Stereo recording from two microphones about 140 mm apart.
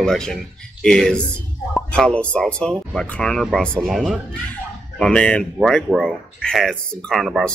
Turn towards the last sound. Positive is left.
turn(degrees=0)  # may be behind; listen again after turning